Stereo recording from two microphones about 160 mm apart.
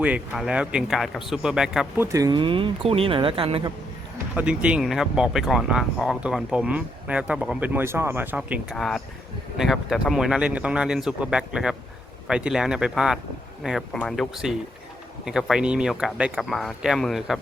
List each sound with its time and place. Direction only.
0.0 s speech: 5° right (ahead or behind)
2.0 s speech: 20° right (ahead or behind)
4.4 s speech: 10° right (ahead or behind)
8.7 s speech: 5° left (ahead or behind)